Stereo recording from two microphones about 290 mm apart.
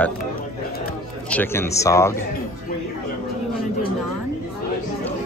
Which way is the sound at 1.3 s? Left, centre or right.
Centre.